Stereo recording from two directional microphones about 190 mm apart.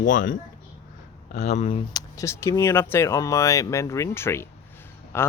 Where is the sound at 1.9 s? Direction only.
15° left (ahead or behind).